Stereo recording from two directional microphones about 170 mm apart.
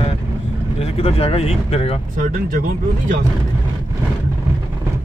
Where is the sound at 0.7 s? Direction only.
35° left (ahead or behind).